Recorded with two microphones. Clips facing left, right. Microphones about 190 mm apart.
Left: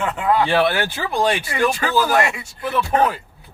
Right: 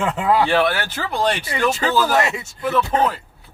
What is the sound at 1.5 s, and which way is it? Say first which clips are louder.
Speech: even; 20° right (ahead or behind).